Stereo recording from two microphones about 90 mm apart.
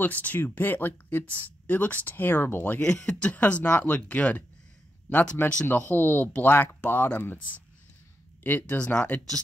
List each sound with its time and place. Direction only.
0.0 s speech: 20° left (ahead or behind)
2.8 s speech: 10° left (ahead or behind)